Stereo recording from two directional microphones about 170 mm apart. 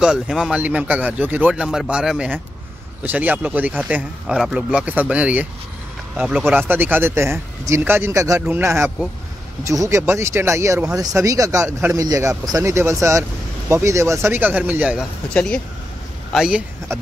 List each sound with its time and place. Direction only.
0.0 s speech: 5° right (ahead or behind)
15.3 s speech: 5° left (ahead or behind)